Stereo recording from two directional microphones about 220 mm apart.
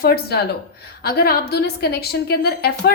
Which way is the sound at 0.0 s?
45° left (ahead or behind).